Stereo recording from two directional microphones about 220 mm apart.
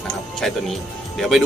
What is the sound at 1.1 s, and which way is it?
Speech, centre (ahead or behind).